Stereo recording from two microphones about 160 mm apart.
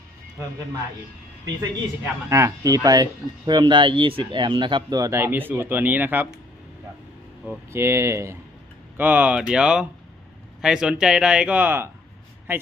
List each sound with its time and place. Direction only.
2.3 s speech: 20° right (ahead or behind)
7.4 s speech: 15° right (ahead or behind)